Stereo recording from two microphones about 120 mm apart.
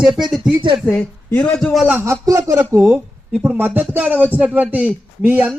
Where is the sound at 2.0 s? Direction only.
25° right (ahead or behind).